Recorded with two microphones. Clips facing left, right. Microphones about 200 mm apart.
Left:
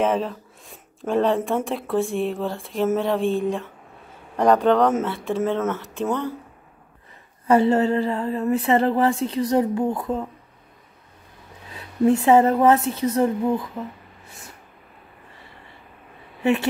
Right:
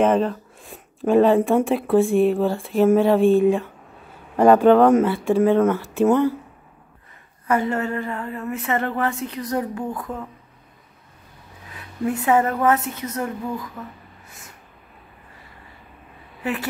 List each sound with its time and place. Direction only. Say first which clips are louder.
0.0 s speech: right 4 dB; 5° left (ahead or behind)
7.4 s speech: left 5 dB; 30° left (ahead or behind)
11.7 s a woman's voice: left 6 dB; 30° left (ahead or behind)
16.4 s speech: left 6 dB; 25° left (ahead or behind)